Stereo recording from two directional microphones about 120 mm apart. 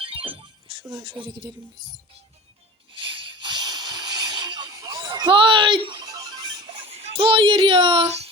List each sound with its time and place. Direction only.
0.0 s music: 50° right (ahead or behind)
1.0 s speech: 40° right (ahead or behind)
2.9 s a sound: 45° right (ahead or behind)
6.7 s speech: 50° right (ahead or behind)